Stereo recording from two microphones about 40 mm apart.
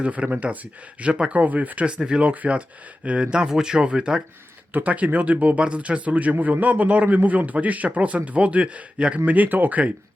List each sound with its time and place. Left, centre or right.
0.0 s a man's voice: right
1.9 s speech: right
2.2 s a man's voice: right; by 4.2 s centre
4.7 s a man's voice: right
9.2 s speech: right